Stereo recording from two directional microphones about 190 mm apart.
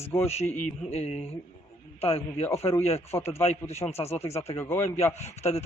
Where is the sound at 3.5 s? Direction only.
35° left (ahead or behind).